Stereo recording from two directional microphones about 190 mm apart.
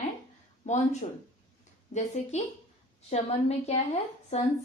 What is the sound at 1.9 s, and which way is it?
A woman's voice, 35° left (ahead or behind).